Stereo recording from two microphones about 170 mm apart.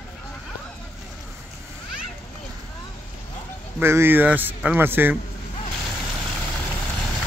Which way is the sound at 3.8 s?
15° right (ahead or behind).